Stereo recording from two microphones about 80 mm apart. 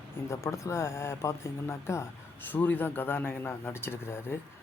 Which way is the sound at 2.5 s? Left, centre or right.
Left.